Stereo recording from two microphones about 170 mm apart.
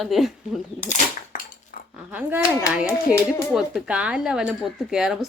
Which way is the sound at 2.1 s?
10° right (ahead or behind).